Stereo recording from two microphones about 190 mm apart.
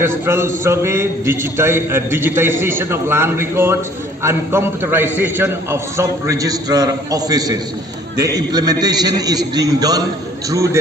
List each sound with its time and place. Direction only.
0.0 s a man's voice: 15° right (ahead or behind)